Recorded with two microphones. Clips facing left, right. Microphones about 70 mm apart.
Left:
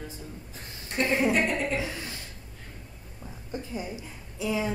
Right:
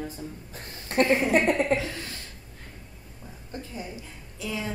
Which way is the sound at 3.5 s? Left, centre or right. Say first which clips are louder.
Left 3 dB; centre.